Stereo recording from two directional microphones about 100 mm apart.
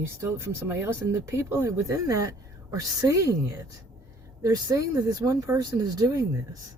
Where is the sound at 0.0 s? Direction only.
25° right (ahead or behind).